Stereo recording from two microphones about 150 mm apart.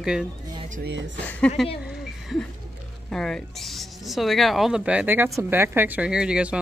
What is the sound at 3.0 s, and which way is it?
Speech, 5° left (ahead or behind).